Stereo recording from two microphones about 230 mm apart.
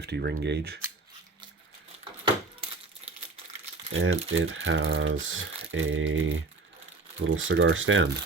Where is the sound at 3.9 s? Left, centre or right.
Right.